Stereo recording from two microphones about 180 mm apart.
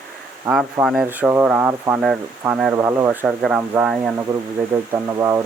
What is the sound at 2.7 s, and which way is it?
Speech, 15° right (ahead or behind).